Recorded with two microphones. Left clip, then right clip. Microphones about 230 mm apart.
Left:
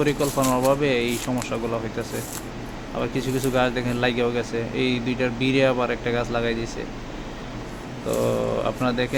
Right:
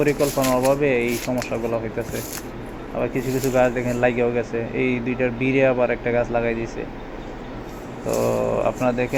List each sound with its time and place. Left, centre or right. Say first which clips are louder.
0.0 s speech: right 2 dB; centre
3.0 s speech: right 2 dB; centre
8.2 s speech: right 3 dB; centre